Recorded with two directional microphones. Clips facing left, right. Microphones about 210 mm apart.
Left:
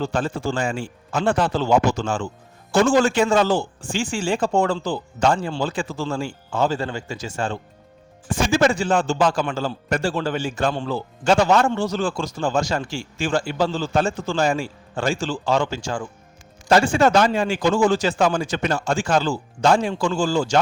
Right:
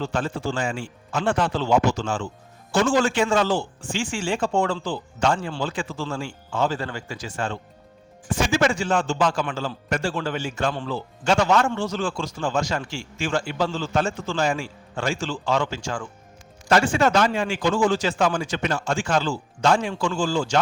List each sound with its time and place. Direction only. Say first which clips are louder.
0.0 s a man's voice: left 2 dB; 40° left (ahead or behind)
6.7 s a man's voice: left 4 dB; 25° left (ahead or behind)